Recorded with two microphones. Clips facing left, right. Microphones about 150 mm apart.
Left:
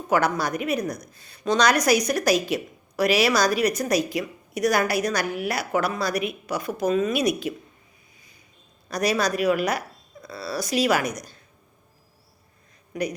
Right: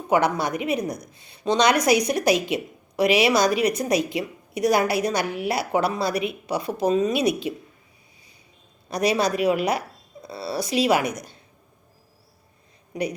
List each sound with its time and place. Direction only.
0.1 s a woman's voice: 25° right (ahead or behind)
8.9 s a woman's voice: 25° right (ahead or behind)